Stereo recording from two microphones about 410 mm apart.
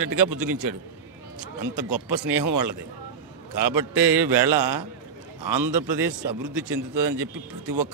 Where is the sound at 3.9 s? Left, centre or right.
Centre.